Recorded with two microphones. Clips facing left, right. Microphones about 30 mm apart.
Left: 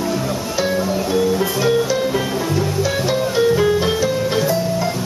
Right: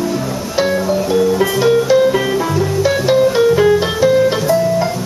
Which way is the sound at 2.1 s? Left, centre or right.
Centre.